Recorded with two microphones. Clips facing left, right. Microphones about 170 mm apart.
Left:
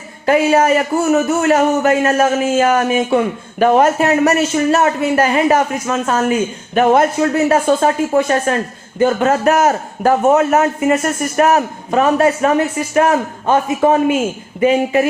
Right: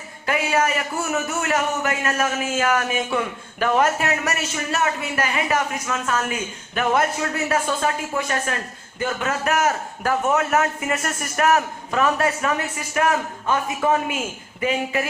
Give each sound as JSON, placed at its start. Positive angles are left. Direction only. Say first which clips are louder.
{"t": 0.3, "sound": "a man's voice", "louder": "left 10 dB", "side_deg": 30}